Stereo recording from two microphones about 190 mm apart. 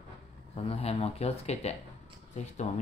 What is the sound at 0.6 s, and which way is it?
Speech, 30° left (ahead or behind).